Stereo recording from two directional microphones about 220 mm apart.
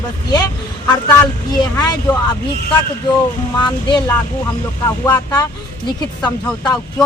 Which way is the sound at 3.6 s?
20° left (ahead or behind).